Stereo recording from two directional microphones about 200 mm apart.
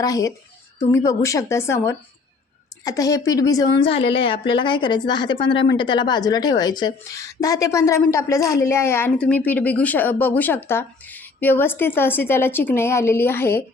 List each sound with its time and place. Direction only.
0.0 s a woman's voice: 15° left (ahead or behind)